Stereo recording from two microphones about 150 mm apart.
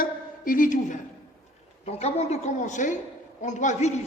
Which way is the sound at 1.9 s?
45° left (ahead or behind).